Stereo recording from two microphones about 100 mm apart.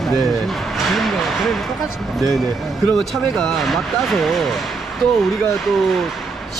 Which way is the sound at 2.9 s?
5° left (ahead or behind).